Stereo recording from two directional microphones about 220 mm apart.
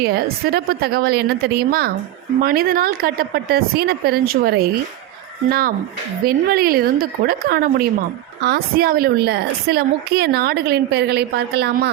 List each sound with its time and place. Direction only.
0.0 s a woman's voice: 45° right (ahead or behind)